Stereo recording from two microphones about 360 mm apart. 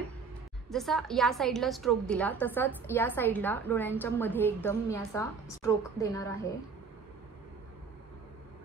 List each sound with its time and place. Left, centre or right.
0.7 s a woman's voice: centre